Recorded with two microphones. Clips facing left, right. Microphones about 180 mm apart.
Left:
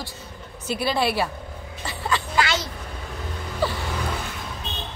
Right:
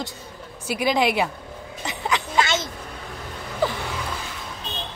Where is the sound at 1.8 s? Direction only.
20° right (ahead or behind).